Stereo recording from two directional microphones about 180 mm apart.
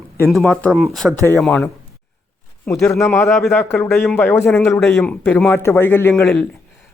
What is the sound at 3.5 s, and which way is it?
Speech, 15° left (ahead or behind).